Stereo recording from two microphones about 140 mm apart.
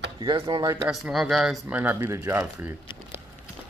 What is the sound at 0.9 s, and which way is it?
Speech, centre (ahead or behind).